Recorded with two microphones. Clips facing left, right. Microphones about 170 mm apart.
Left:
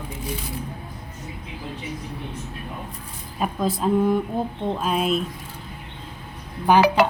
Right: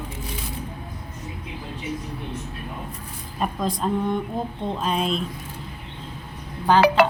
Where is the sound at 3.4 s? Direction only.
5° left (ahead or behind).